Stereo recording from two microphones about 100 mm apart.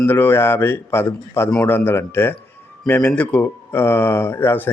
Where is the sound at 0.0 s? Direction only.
20° left (ahead or behind).